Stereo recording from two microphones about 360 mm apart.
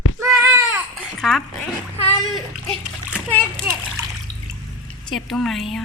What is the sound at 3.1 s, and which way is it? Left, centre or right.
Splash, centre.